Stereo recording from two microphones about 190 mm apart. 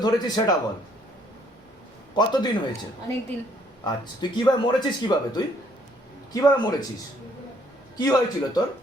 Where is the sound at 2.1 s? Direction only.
25° left (ahead or behind).